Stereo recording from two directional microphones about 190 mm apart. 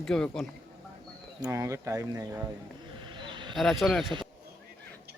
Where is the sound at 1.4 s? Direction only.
15° right (ahead or behind).